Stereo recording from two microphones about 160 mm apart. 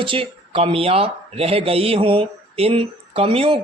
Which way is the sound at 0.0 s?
35° right (ahead or behind).